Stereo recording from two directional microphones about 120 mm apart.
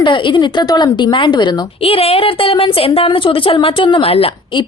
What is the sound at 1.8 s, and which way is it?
A woman's voice, 55° left (ahead or behind).